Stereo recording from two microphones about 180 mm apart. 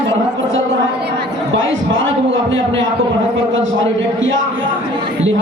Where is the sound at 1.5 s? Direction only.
90° right.